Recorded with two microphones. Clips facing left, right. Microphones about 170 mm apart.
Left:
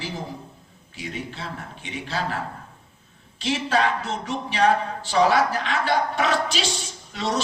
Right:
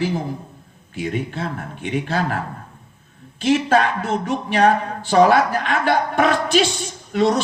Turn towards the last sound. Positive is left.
turn(degrees=-55)  # may be behind; listen again after turning